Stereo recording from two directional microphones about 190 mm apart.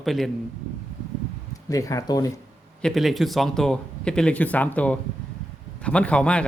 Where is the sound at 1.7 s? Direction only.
15° left (ahead or behind).